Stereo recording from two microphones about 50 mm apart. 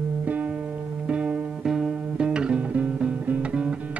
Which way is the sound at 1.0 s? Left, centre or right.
Right.